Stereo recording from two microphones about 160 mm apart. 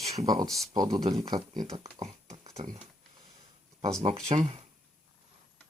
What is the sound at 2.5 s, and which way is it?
Speech, 25° right (ahead or behind).